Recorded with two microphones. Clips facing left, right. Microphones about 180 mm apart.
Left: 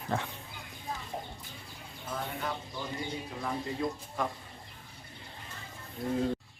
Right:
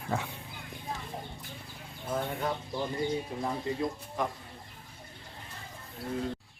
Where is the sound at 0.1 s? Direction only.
5° right (ahead or behind).